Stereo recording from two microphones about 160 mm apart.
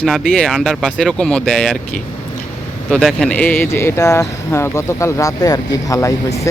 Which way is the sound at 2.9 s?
Centre (ahead or behind).